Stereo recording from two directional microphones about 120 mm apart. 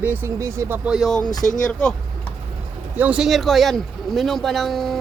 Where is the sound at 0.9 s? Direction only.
Centre (ahead or behind).